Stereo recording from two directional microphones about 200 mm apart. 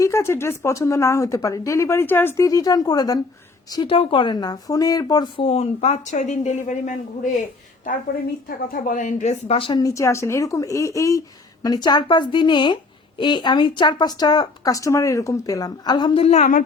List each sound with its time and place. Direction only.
0.0 s speech: 15° left (ahead or behind); by 6.9 s 35° left (ahead or behind)
8.4 s speech: 45° left (ahead or behind)